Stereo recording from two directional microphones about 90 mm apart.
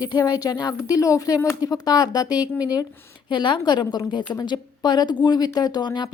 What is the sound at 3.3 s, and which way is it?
A woman's voice, 60° left (ahead or behind).